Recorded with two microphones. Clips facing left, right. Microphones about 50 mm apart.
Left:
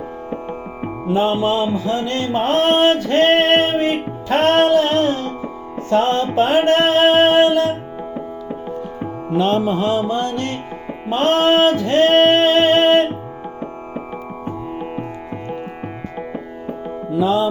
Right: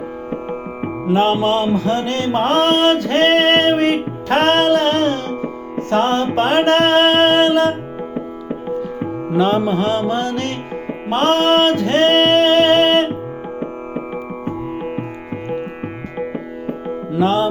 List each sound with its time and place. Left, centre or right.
1.0 s music: right
9.7 s music: right
11.1 s music: right
16.1 s music: right
17.1 s music: right